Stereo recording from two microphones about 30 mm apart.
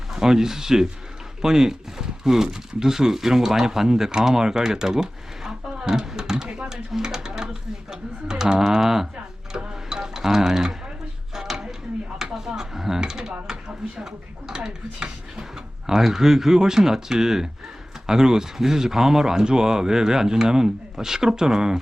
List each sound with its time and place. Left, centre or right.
0.1 s speech: centre
9.5 s sewing machine: right
11.3 s a sound: centre
13.0 s speech: right
14.9 s speech: right
15.9 s speech: centre